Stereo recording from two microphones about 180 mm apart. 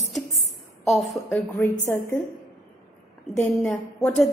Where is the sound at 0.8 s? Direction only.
Centre (ahead or behind).